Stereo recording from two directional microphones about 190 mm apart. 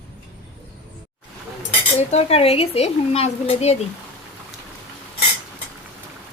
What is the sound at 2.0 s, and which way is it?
Speech, 35° left (ahead or behind).